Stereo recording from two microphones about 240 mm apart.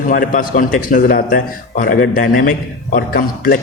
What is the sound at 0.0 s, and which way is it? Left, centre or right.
A man's voice, left.